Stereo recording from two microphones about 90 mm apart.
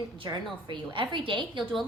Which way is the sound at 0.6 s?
60° right (ahead or behind).